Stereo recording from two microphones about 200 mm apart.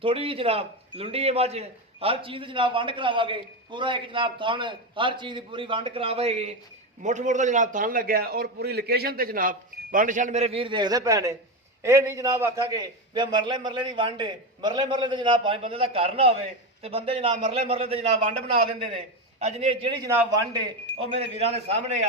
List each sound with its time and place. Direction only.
0.0 s a man's voice: 25° right (ahead or behind)
20.1 s a man's voice: 15° right (ahead or behind); by 22.0 s 35° right (ahead or behind)